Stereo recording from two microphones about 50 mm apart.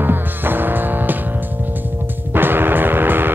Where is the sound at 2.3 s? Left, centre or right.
Right.